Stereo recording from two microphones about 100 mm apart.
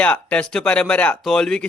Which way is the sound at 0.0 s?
15° left (ahead or behind).